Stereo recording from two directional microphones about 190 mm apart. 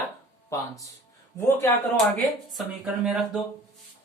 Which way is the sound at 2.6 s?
Centre (ahead or behind).